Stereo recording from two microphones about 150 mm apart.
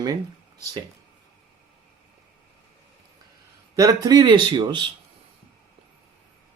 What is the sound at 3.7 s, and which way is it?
Speech, 20° right (ahead or behind).